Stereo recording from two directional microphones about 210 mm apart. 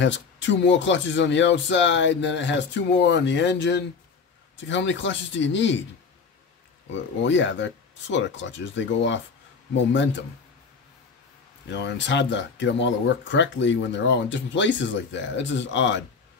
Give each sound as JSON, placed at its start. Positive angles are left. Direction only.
{"t": 0.0, "sound": "speech", "side_deg": 60}
{"t": 6.9, "sound": "speech", "side_deg": 60}
{"t": 11.7, "sound": "speech", "side_deg": 55}